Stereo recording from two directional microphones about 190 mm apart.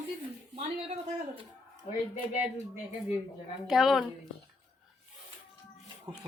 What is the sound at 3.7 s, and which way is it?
Speech, centre (ahead or behind).